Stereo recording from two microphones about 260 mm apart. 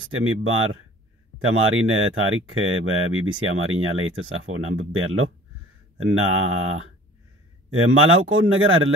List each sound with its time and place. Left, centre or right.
0.1 s speech: right